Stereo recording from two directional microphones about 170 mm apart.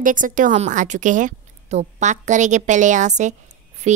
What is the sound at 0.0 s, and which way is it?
A woman's voice, 50° right (ahead or behind).